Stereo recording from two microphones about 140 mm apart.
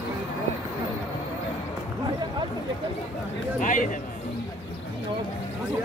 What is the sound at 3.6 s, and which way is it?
Speech, 70° left (ahead or behind).